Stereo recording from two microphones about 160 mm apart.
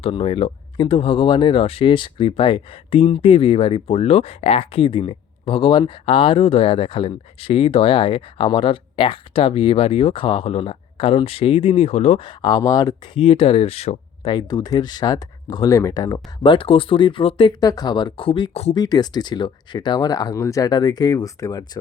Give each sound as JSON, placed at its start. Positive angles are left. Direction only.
{"t": 0.0, "sound": "speech", "side_deg": 35}
{"t": 12.4, "sound": "speech", "side_deg": 25}
{"t": 13.1, "sound": "speech", "side_deg": 35}
{"t": 14.3, "sound": "speech", "side_deg": 25}